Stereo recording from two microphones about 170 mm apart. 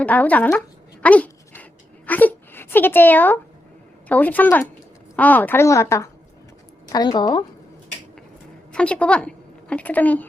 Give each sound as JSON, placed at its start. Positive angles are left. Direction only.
{"t": 0.0, "sound": "a woman's voice", "side_deg": 10}
{"t": 1.0, "sound": "dog", "side_deg": 10}
{"t": 2.0, "sound": "a woman's voice", "side_deg": 10}
{"t": 8.7, "sound": "a woman's voice", "side_deg": 5}